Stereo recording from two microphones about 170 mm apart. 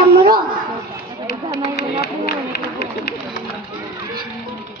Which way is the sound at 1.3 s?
75° left (ahead or behind).